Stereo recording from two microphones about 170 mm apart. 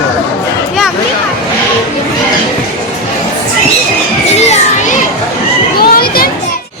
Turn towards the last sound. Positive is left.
turn(degrees=65)  # may be behind; listen again after turning